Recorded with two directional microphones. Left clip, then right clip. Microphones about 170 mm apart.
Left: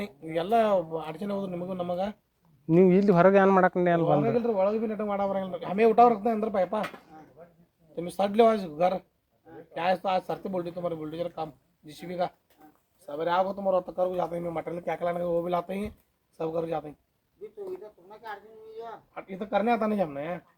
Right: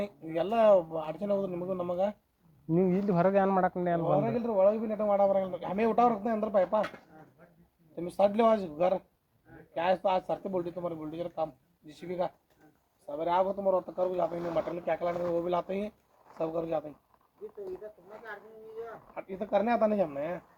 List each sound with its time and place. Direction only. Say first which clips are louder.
0.0 s speech: left 1 dB; 5° left (ahead or behind)
2.6 s speech: left 8 dB; 90° left
4.0 s a man's voice: left 4 dB; 10° left (ahead or behind)
7.9 s a man's voice: left 3 dB; 10° left (ahead or behind)
19.1 s a man's voice: left 1 dB; 5° left (ahead or behind)